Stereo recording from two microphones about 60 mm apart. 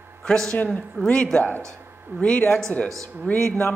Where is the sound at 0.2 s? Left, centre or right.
Centre.